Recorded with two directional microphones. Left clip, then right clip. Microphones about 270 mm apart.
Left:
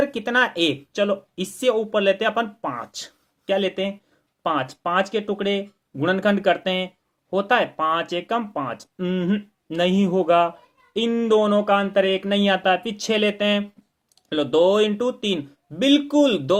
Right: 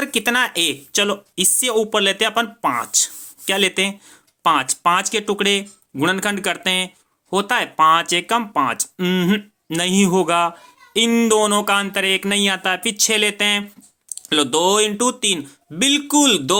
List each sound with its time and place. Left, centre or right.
0.0 s speech: right